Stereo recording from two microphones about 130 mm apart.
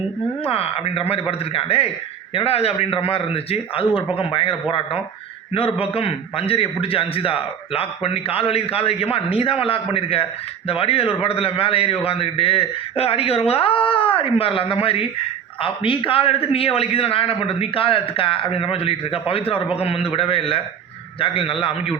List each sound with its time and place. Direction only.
0.4 s a man's voice: 45° left (ahead or behind)
5.5 s a man's voice: 45° left (ahead or behind)